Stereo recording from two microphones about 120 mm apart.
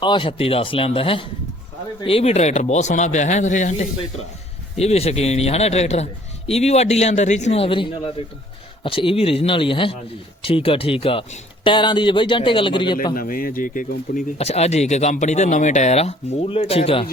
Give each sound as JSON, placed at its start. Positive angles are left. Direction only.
{"t": 0.0, "sound": "a man's voice", "side_deg": 45}
{"t": 4.8, "sound": "a man's voice", "side_deg": 60}
{"t": 14.2, "sound": "speech", "side_deg": 60}